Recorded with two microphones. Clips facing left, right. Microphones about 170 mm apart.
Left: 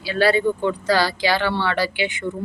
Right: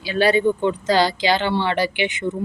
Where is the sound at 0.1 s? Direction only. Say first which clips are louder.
Right 1 dB; 20° right (ahead or behind).